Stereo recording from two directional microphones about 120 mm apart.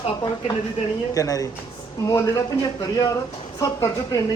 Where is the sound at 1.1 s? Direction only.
30° left (ahead or behind).